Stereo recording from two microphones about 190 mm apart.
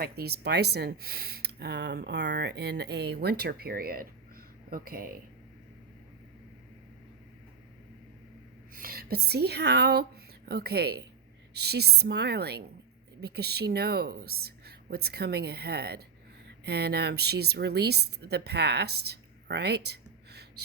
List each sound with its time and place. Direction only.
0.0 s speech: 55° right (ahead or behind)
8.7 s a woman's voice: 50° right (ahead or behind)